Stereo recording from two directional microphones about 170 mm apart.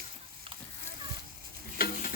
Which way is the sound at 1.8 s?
55° left (ahead or behind).